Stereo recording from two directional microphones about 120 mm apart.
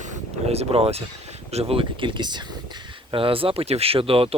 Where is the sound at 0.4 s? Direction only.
60° right (ahead or behind).